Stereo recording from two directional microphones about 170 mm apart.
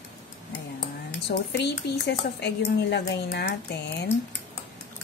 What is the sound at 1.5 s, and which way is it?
Speech, 80° left.